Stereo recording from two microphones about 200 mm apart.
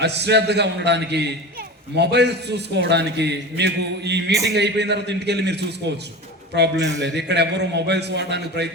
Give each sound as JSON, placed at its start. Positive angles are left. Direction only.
{"t": 0.0, "sound": "a man's voice", "side_deg": -60}